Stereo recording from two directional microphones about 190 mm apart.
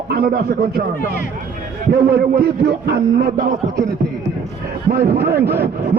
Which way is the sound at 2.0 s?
55° right (ahead or behind).